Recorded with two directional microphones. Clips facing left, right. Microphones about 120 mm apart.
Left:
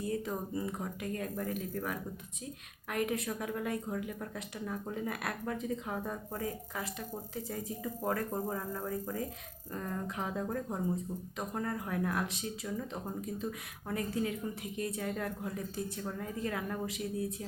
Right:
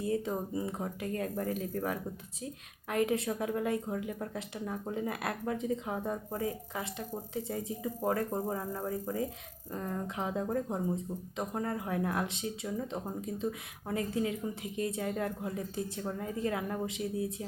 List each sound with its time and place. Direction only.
0.0 s speech: 25° right (ahead or behind)
8.0 s speech: 25° right (ahead or behind)